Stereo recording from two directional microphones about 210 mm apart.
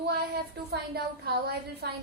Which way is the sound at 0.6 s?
50° right (ahead or behind).